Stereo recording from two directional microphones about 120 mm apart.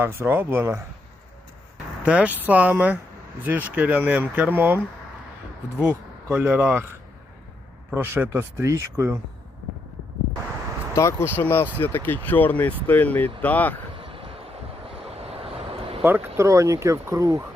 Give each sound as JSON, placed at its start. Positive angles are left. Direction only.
{"t": 0.0, "sound": "speech", "side_deg": -20}
{"t": 2.0, "sound": "speech", "side_deg": -10}
{"t": 7.9, "sound": "speech", "side_deg": -20}
{"t": 10.9, "sound": "speech", "side_deg": 20}
{"t": 13.9, "sound": "a sound", "side_deg": -50}
{"t": 14.8, "sound": "vehicle", "side_deg": -55}
{"t": 16.0, "sound": "speech", "side_deg": -15}